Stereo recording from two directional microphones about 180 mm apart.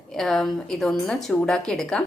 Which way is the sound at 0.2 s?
Centre (ahead or behind).